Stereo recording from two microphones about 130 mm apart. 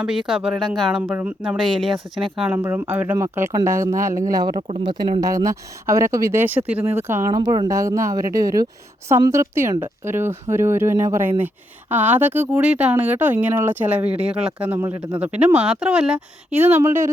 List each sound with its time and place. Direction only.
0.0 s speech: 5° right (ahead or behind)
1.5 s speech: centre (ahead or behind)
2.3 s speech: 15° right (ahead or behind)
4.8 s speech: 40° right (ahead or behind)
5.2 s speech: 25° right (ahead or behind)